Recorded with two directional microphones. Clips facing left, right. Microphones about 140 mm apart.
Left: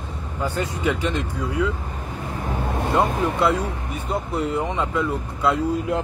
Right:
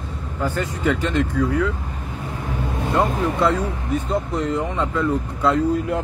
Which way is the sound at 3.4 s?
10° left (ahead or behind).